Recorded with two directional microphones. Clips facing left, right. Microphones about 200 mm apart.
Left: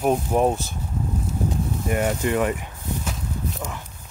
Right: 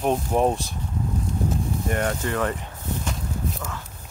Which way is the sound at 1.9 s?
10° left (ahead or behind).